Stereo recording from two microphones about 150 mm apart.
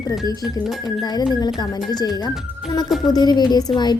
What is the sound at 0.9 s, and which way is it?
Music, 30° left (ahead or behind).